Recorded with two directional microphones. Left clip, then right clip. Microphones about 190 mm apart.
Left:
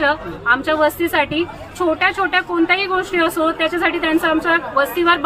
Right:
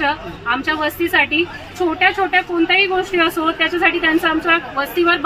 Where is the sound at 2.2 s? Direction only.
15° left (ahead or behind).